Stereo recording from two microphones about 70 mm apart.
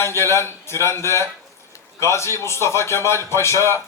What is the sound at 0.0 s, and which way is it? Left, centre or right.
Speech, left.